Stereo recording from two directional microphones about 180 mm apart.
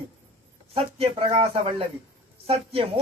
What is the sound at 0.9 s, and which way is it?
Speech, 35° right (ahead or behind).